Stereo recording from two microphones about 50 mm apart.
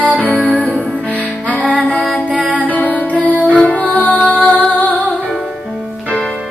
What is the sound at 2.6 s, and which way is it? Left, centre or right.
Music, left.